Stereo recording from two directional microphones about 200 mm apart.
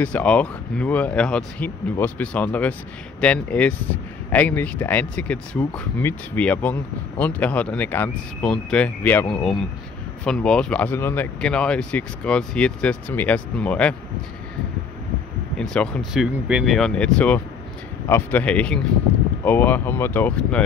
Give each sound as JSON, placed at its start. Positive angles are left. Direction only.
{"t": 0.0, "sound": "speech", "side_deg": 5}
{"t": 15.6, "sound": "speech", "side_deg": 5}